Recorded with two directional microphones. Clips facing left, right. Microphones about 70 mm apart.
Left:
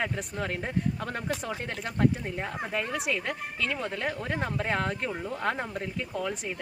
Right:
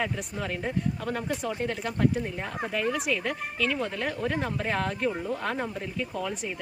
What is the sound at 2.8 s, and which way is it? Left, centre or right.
Speech, centre.